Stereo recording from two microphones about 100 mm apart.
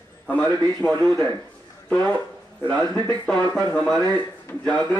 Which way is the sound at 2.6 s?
10° left (ahead or behind).